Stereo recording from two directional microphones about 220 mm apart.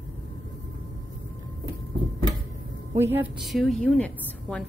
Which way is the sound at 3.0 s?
10° right (ahead or behind).